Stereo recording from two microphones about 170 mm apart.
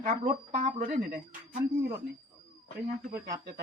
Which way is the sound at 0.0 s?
45° right (ahead or behind).